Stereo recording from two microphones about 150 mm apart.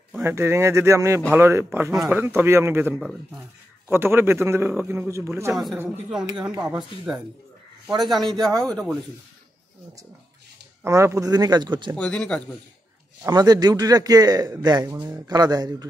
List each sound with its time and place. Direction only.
0.1 s a man's voice: 15° right (ahead or behind)
3.0 s speech: centre (ahead or behind)
3.9 s a man's voice: 15° right (ahead or behind)
5.5 s speech: centre (ahead or behind)
8.0 s speech: centre (ahead or behind)
10.8 s a man's voice: 20° right (ahead or behind)
12.0 s speech: 5° left (ahead or behind)
13.2 s a man's voice: 25° right (ahead or behind)